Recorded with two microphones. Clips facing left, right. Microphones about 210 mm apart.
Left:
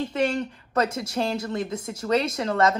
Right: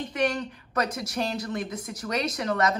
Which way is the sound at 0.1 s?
25° left (ahead or behind).